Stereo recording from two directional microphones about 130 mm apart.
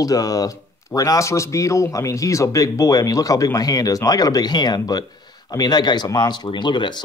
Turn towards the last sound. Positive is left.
turn(degrees=35)  # may be behind; listen again after turning